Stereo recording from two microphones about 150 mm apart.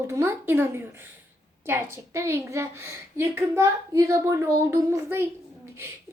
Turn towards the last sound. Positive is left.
turn(degrees=-20)  # may be behind; listen again after turning